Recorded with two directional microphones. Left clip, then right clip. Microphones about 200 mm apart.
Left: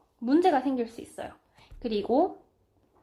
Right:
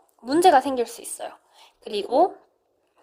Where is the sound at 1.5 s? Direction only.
40° right (ahead or behind).